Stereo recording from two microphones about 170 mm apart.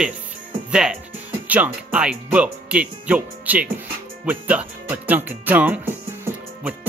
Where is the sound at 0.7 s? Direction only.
5° right (ahead or behind).